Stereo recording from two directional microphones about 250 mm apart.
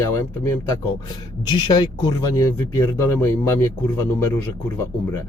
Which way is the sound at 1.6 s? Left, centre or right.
Centre.